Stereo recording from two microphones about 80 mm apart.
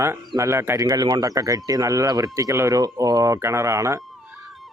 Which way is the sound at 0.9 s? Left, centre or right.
Right.